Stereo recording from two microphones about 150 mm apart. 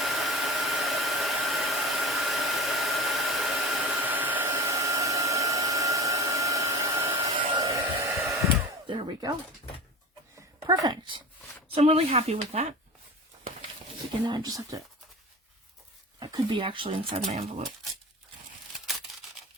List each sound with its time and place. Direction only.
0.0 s hair dryer: centre (ahead or behind); by 8.2 s 20° right (ahead or behind)
8.9 s music: 35° right (ahead or behind)
10.7 s speech: 30° right (ahead or behind)
11.7 s speech: 40° right (ahead or behind)
14.3 s speech: 25° right (ahead or behind)
16.2 s speech: 30° right (ahead or behind)